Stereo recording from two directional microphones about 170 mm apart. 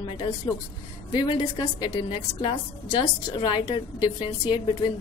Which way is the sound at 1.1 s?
25° left (ahead or behind).